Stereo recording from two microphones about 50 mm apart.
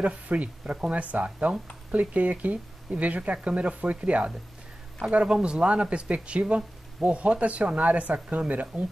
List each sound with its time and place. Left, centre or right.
0.0 s speech: right